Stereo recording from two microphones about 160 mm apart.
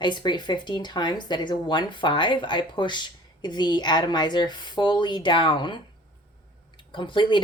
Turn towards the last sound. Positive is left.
turn(degrees=30)  # may be behind; listen again after turning